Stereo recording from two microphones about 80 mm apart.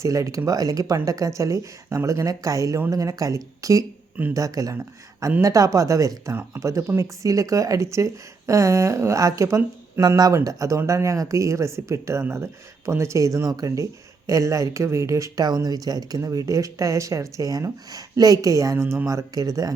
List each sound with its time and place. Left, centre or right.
0.0 s speech: right
15.4 s speech: right